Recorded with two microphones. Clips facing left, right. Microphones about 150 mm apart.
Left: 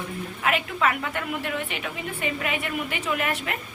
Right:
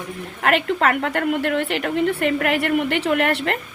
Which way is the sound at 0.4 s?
65° right (ahead or behind).